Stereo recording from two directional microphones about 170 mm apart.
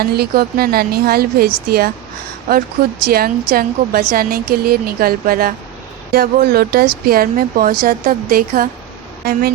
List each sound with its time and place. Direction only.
0.0 s a woman's voice: 65° right (ahead or behind)